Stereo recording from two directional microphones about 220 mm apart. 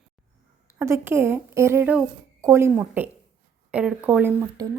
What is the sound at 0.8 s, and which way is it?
A woman's voice, 10° right (ahead or behind).